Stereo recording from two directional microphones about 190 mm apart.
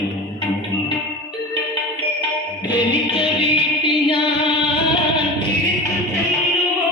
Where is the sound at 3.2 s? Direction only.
25° left (ahead or behind).